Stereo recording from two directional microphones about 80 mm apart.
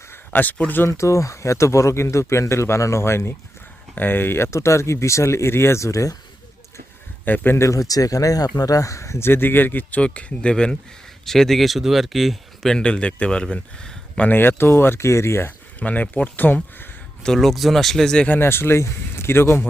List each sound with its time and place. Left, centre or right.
0.1 s speech: left
0.9 s speech: left
7.3 s speech: left
7.5 s speech: left; by 14.3 s centre
14.3 s speech: left
15.8 s speech: centre
17.2 s speech: centre
18.3 s speech: left